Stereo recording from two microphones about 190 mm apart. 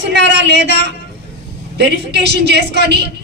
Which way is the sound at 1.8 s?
60° right (ahead or behind).